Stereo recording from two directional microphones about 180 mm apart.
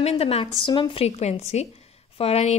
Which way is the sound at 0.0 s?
35° left (ahead or behind).